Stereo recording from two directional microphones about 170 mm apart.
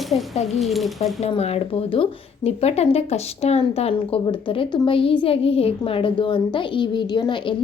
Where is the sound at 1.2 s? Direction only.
35° left (ahead or behind).